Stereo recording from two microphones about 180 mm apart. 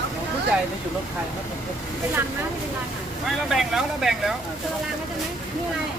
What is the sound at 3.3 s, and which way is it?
Speech, centre (ahead or behind).